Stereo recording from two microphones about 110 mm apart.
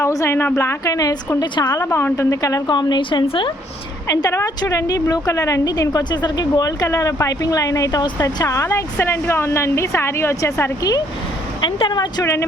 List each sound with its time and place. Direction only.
0.0 s a woman's voice: 25° left (ahead or behind)
1.8 s speech: 20° left (ahead or behind); by 3.5 s 50° left (ahead or behind)
4.1 s a woman's voice: 30° left (ahead or behind)
11.6 s speech: 45° left (ahead or behind)
12.2 s a woman's voice: 25° left (ahead or behind)